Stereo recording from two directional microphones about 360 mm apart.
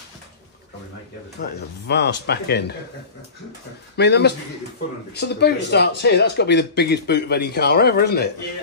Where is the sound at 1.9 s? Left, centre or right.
Left.